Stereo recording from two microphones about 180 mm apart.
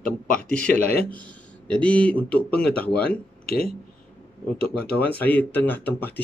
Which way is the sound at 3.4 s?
55° left (ahead or behind).